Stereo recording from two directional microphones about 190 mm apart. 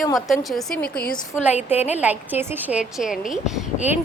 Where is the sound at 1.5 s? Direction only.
10° right (ahead or behind).